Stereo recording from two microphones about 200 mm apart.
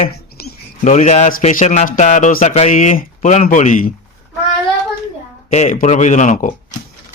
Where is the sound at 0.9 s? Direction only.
35° left (ahead or behind).